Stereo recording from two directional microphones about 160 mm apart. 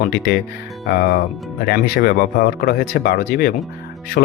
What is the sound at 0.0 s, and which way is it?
Speech, 80° left.